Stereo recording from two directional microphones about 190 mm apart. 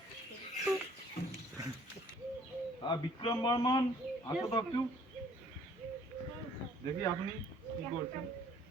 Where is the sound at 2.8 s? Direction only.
25° left (ahead or behind).